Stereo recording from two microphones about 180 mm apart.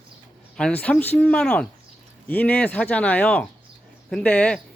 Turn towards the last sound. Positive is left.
turn(degrees=5)  # may be behind; listen again after turning